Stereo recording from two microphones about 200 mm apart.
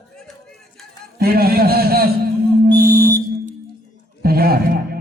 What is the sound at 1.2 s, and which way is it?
Speech, 50° right (ahead or behind).